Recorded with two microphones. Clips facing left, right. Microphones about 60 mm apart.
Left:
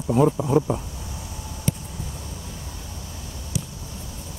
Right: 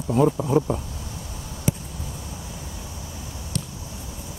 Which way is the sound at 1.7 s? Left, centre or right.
Centre.